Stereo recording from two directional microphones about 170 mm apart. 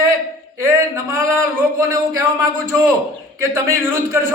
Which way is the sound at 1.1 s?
15° right (ahead or behind).